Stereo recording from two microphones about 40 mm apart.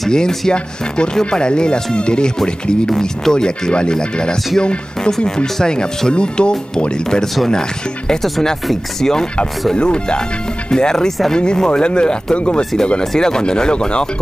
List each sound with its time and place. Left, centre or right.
0.1 s speech: centre
8.2 s speech: centre; by 12.6 s left
13.0 s speech: centre